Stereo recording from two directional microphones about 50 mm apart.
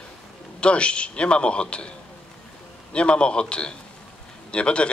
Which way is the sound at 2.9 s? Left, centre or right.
Left.